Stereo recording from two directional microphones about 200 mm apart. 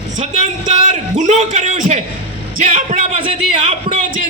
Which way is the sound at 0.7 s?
35° right (ahead or behind).